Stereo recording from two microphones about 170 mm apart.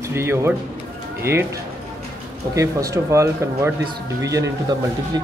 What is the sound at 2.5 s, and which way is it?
Speech, 20° right (ahead or behind).